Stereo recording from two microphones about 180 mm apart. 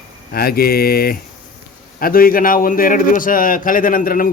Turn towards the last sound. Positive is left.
turn(degrees=50)  # may be behind; listen again after turning